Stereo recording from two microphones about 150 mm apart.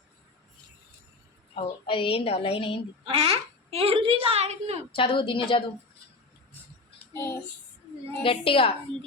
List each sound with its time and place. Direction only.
1.5 s a woman's voice: 35° left (ahead or behind)
3.0 s a child's voice: 40° right (ahead or behind)
4.9 s a woman's voice: 35° left (ahead or behind)
7.1 s a sound: 15° left (ahead or behind)
8.2 s a woman's voice: 35° left (ahead or behind)